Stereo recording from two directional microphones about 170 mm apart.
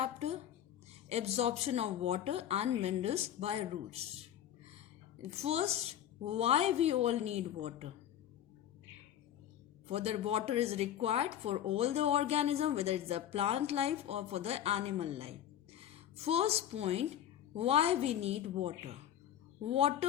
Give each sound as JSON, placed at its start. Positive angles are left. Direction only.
{"t": 0.0, "sound": "speech", "side_deg": -40}
{"t": 5.3, "sound": "speech", "side_deg": -35}
{"t": 9.8, "sound": "speech", "side_deg": -35}